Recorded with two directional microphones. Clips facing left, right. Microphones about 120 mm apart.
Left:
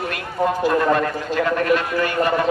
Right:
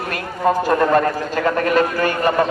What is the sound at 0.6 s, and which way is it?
A man's voice, 45° right (ahead or behind).